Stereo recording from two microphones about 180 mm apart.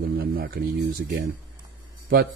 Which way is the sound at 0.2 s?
55° right (ahead or behind).